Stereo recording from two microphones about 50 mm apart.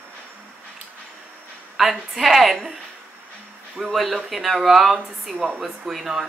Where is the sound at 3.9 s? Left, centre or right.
Centre.